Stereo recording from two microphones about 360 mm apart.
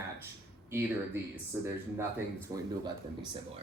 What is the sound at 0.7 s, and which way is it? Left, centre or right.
Speech, centre.